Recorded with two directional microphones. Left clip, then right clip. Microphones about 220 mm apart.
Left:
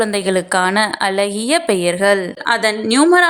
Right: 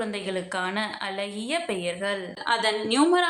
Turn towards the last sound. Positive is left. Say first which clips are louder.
# left 9 dB
turn(degrees=35)  # may be behind; listen again after turning